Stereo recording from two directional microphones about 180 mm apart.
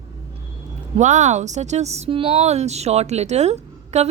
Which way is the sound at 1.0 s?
40° right (ahead or behind).